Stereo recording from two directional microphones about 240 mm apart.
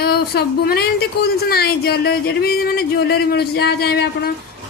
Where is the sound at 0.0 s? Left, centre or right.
Left.